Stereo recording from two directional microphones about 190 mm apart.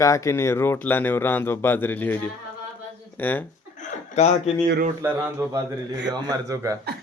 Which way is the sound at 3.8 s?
35° left (ahead or behind).